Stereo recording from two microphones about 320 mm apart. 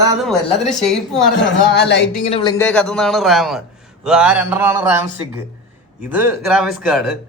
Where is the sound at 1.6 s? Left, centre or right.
Left.